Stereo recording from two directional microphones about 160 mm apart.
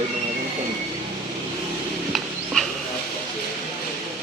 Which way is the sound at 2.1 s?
Centre (ahead or behind).